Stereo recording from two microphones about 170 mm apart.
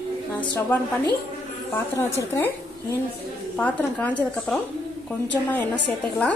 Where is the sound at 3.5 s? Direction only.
10° left (ahead or behind).